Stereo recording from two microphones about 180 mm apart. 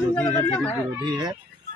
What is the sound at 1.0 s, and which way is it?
Speech, 25° right (ahead or behind).